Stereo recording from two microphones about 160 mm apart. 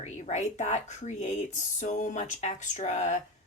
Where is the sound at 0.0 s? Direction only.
45° left (ahead or behind).